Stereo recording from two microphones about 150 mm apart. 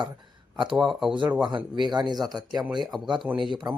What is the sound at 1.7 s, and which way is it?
Speech, 30° right (ahead or behind).